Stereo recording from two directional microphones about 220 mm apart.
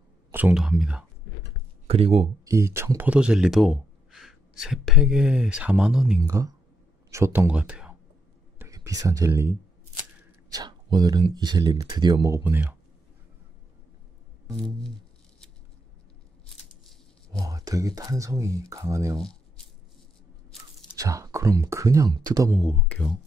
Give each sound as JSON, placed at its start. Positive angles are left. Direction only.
{"t": 0.3, "sound": "speech", "side_deg": -10}
{"t": 1.9, "sound": "speech", "side_deg": -25}
{"t": 2.4, "sound": "speech", "side_deg": -15}
{"t": 16.4, "sound": "a sound", "side_deg": 0}
{"t": 17.4, "sound": "speech", "side_deg": -15}
{"t": 20.9, "sound": "speech", "side_deg": -15}
{"t": 22.6, "sound": "speech", "side_deg": 5}